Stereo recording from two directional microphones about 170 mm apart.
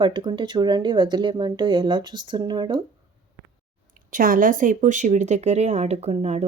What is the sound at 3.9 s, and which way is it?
Speech, 55° right (ahead or behind).